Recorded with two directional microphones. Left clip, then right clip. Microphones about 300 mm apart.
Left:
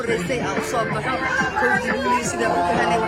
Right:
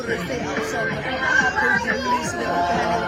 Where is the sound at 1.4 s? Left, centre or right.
Centre.